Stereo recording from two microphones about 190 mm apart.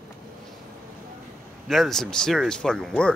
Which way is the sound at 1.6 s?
Centre (ahead or behind).